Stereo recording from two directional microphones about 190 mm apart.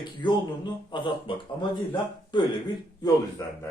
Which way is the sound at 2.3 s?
25° left (ahead or behind).